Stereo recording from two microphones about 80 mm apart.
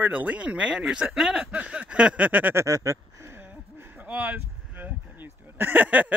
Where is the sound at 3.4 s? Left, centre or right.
Right.